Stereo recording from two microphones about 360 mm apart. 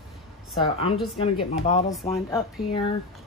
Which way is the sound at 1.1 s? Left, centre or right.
Centre.